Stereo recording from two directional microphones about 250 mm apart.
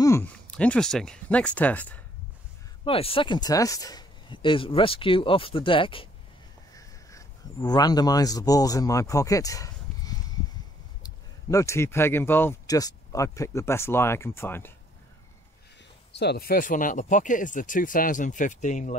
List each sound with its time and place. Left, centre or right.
0.0 s speech: centre
2.8 s speech: left
11.5 s speech: centre
16.2 s speech: left